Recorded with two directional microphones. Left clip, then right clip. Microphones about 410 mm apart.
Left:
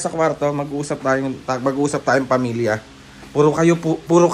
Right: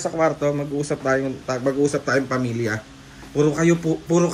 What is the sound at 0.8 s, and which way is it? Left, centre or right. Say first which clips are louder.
Speech: left 3 dB; centre.